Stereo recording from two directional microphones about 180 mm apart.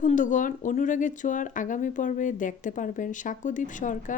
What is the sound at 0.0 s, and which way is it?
Speech, 45° left (ahead or behind).